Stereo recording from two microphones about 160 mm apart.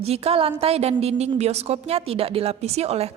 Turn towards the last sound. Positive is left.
turn(degrees=-40)  # may be behind; listen again after turning